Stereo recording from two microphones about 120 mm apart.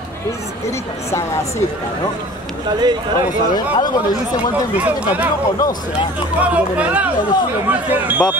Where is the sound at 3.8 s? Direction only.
35° left (ahead or behind).